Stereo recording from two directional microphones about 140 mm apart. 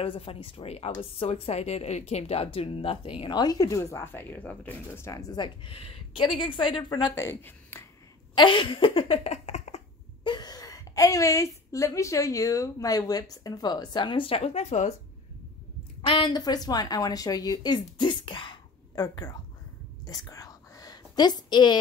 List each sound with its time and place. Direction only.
0.0 s speech: 40° left (ahead or behind); by 7.8 s 20° left (ahead or behind)
8.4 s laughter: 35° left (ahead or behind)
10.2 s a woman's voice: 30° left (ahead or behind); by 15.0 s 50° left (ahead or behind)
16.1 s a woman's voice: 35° left (ahead or behind)
20.1 s whispering: 25° left (ahead or behind)